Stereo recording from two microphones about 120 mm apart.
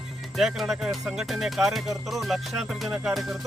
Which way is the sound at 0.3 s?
Centre (ahead or behind).